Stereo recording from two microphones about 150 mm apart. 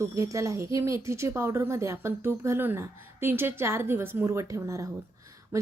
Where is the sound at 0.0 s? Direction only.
20° right (ahead or behind).